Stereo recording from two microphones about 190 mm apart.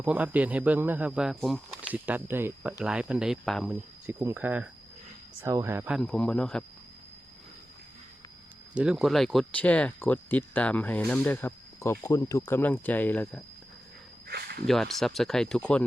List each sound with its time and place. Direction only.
0.0 s speech: 10° right (ahead or behind)
6.1 s speech: 5° left (ahead or behind)
8.7 s speech: 5° right (ahead or behind)
14.3 s a sound: 55° right (ahead or behind)
14.7 s speech: centre (ahead or behind)